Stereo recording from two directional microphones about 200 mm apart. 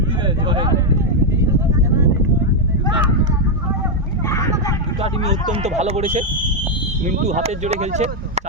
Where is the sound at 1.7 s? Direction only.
15° right (ahead or behind).